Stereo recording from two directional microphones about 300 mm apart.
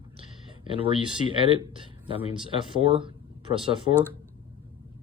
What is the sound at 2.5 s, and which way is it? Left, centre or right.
Speech, centre.